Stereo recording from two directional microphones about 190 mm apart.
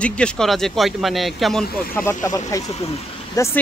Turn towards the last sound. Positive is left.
turn(degrees=15)  # may be behind; listen again after turning